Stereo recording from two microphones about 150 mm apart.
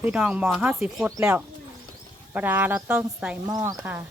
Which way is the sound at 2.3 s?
10° right (ahead or behind).